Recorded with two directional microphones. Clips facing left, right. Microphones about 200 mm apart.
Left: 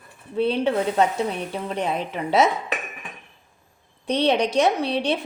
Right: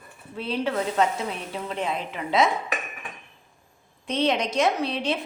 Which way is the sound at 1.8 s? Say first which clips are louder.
Left 4 dB; 40° left (ahead or behind).